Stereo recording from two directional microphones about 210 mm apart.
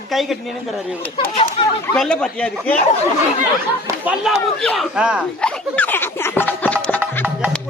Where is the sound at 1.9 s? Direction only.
5° left (ahead or behind).